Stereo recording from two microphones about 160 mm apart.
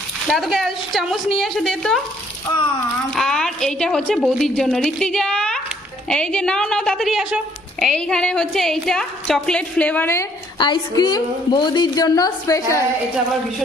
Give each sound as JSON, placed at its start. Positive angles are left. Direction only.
{"t": 0.3, "sound": "a woman's voice", "side_deg": 0}
{"t": 3.2, "sound": "a woman's voice", "side_deg": 5}
{"t": 10.6, "sound": "a woman's voice", "side_deg": 25}